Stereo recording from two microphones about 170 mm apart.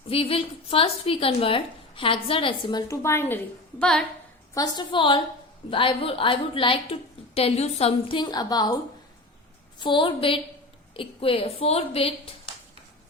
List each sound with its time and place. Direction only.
0.1 s a woman's voice: 35° left (ahead or behind); by 4.0 s 5° left (ahead or behind)
4.5 s a woman's voice: 25° left (ahead or behind)